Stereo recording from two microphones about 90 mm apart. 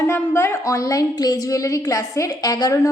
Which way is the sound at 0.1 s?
30° left (ahead or behind).